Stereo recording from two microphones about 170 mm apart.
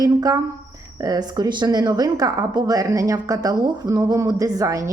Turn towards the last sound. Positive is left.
turn(degrees=-20)  # may be behind; listen again after turning